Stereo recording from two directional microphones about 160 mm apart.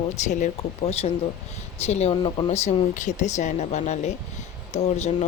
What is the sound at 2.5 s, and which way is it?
Speech, 45° left (ahead or behind).